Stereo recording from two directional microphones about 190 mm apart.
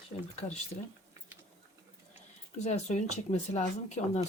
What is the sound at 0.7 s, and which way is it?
Speech, 35° left (ahead or behind).